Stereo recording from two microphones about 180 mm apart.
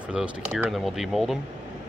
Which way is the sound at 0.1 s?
5° right (ahead or behind).